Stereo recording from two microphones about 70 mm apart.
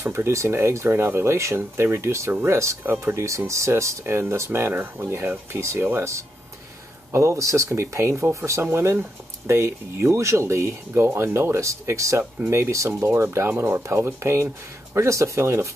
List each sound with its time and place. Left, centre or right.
0.0 s speech: right
7.1 s speech: right